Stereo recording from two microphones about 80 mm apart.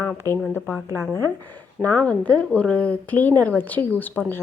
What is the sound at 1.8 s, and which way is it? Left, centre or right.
Speech, centre.